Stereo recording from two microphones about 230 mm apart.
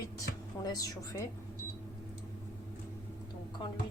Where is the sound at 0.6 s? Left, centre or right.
Centre.